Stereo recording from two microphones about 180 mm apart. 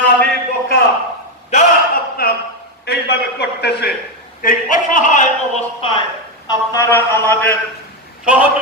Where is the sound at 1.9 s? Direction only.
55° left (ahead or behind).